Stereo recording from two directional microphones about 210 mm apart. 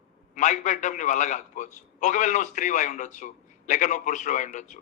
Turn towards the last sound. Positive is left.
turn(degrees=35)  # may be behind; listen again after turning